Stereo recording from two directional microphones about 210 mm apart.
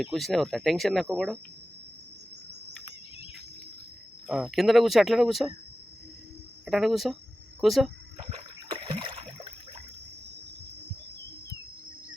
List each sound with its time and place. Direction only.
0.0 s speech: centre (ahead or behind)
4.3 s speech: centre (ahead or behind)
6.7 s speech: centre (ahead or behind)
8.7 s rowboat: 20° right (ahead or behind)